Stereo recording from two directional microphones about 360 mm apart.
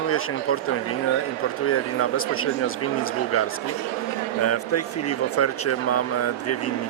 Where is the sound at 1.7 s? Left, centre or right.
Left.